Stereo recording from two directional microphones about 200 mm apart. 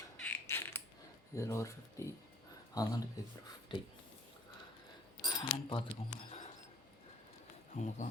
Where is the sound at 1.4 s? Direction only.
15° left (ahead or behind).